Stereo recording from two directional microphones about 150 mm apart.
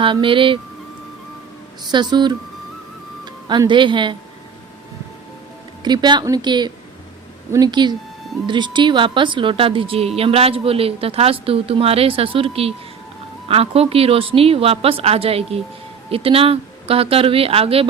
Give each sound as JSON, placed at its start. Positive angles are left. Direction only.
{"t": 0.0, "sound": "a woman's voice", "side_deg": -35}
{"t": 1.9, "sound": "a woman's voice", "side_deg": -30}
{"t": 3.5, "sound": "a woman's voice", "side_deg": -30}
{"t": 5.8, "sound": "a woman's voice", "side_deg": -30}